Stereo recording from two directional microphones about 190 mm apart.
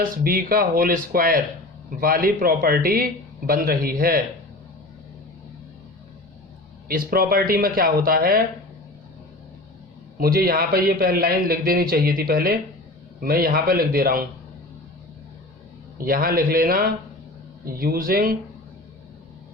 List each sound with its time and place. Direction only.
0.0 s a man's voice: 50° right (ahead or behind)
6.8 s a man's voice: 50° right (ahead or behind)
10.2 s a man's voice: 50° right (ahead or behind)
16.0 s a man's voice: 50° right (ahead or behind)